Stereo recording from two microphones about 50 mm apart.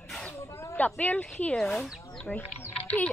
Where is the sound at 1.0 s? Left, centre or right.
Left.